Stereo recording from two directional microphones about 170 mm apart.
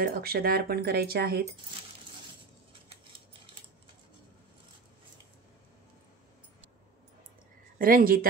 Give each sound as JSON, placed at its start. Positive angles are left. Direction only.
{"t": 0.0, "sound": "speech", "side_deg": -60}
{"t": 7.8, "sound": "speech", "side_deg": -60}